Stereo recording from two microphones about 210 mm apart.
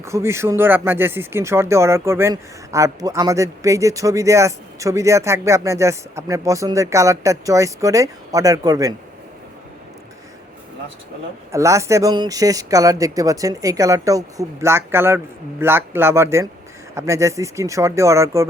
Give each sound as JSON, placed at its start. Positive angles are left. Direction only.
{"t": 0.0, "sound": "speech", "side_deg": -15}
{"t": 11.5, "sound": "speech", "side_deg": -15}